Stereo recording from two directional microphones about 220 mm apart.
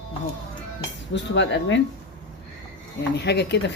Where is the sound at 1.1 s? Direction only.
55° left (ahead or behind).